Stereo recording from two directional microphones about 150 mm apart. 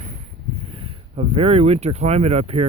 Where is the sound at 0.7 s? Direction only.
40° right (ahead or behind).